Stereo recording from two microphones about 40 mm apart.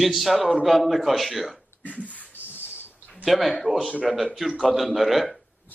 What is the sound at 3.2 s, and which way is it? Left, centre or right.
Speech, centre.